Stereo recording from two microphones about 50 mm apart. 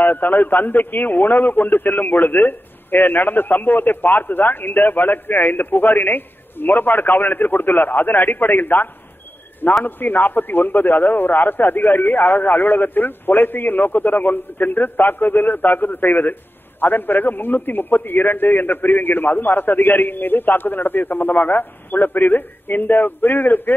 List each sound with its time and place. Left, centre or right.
0.0 s a man's voice: left
9.8 s a man's voice: left